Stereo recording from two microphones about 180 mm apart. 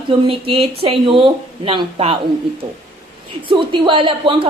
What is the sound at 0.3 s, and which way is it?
Speech, 30° right (ahead or behind).